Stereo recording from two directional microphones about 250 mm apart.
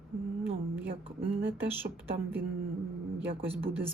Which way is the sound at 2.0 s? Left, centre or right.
Centre.